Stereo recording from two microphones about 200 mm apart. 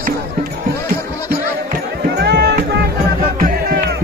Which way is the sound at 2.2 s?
55° right (ahead or behind).